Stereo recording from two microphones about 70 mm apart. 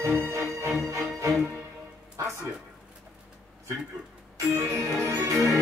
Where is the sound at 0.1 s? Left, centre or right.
Right.